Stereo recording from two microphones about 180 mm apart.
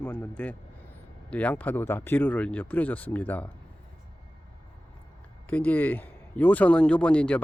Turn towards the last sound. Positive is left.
turn(degrees=5)  # may be behind; listen again after turning